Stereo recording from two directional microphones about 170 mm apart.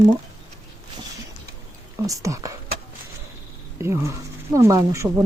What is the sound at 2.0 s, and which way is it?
Speech, 20° right (ahead or behind).